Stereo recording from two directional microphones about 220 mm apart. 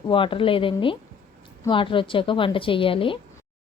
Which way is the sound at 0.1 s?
25° left (ahead or behind).